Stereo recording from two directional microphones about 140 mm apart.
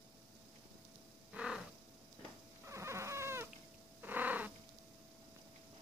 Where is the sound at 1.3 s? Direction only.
5° right (ahead or behind).